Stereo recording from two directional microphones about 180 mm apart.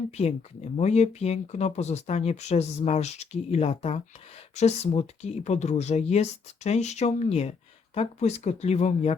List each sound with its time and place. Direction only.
0.2 s speech: 35° left (ahead or behind)